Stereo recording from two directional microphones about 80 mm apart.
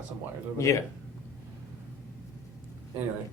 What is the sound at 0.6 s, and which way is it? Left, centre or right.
Speech, left.